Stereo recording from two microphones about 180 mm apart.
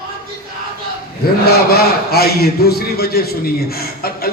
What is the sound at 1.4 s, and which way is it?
A man's voice, 60° left (ahead or behind).